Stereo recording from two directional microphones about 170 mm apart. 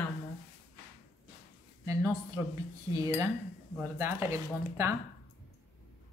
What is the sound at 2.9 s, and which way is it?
A woman's voice, 20° right (ahead or behind).